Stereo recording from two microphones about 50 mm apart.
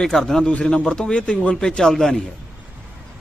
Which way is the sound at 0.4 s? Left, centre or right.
Left.